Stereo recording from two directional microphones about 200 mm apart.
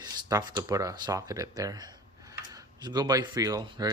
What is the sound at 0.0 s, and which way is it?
Speech, 20° right (ahead or behind).